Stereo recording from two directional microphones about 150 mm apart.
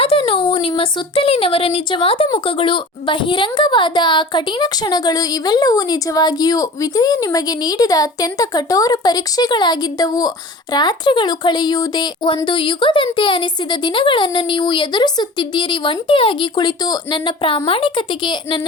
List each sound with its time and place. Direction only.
0.0 s speech: 35° left (ahead or behind)